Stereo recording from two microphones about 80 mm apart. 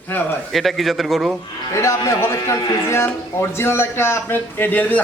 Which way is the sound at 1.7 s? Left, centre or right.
Left.